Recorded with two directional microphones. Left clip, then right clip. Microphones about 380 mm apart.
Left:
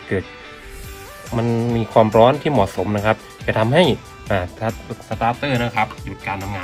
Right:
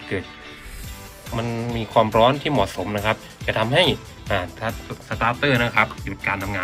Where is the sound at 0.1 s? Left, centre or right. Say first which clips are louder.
Left 5 dB; centre.